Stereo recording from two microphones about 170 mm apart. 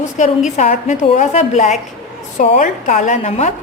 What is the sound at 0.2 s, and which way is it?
A woman's voice, 45° left (ahead or behind).